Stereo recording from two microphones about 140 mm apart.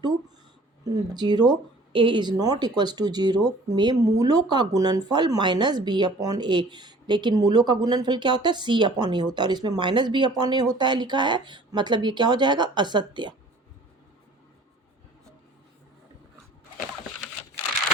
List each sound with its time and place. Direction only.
0.9 s speech: 30° right (ahead or behind)